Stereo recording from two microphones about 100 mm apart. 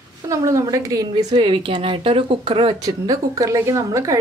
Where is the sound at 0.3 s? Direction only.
30° right (ahead or behind).